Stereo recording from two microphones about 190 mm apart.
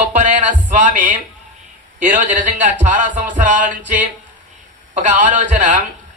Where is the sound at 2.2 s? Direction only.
40° right (ahead or behind).